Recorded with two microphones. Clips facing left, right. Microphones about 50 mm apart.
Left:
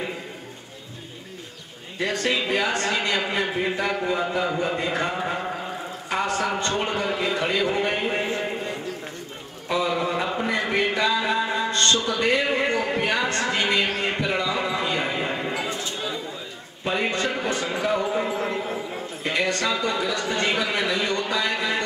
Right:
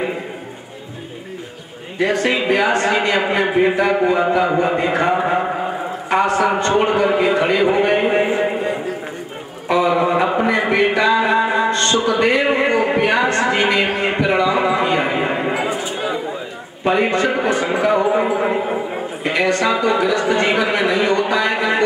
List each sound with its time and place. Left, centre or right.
2.0 s a man's voice: right
9.7 s a sound: right
16.8 s speech: right